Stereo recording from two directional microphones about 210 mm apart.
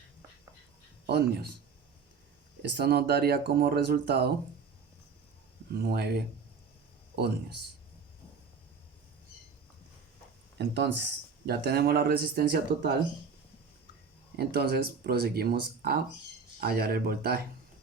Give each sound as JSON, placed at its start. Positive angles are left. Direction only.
{"t": 1.0, "sound": "speech", "side_deg": -50}
{"t": 2.6, "sound": "speech", "side_deg": -50}
{"t": 5.7, "sound": "speech", "side_deg": -50}
{"t": 10.6, "sound": "speech", "side_deg": -55}
{"t": 14.3, "sound": "speech", "side_deg": -50}